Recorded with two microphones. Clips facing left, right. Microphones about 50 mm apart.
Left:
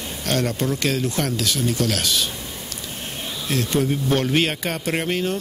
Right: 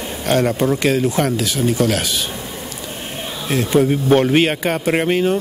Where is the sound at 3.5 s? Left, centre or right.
Centre.